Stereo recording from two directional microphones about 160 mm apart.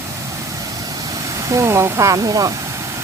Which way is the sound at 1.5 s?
20° right (ahead or behind).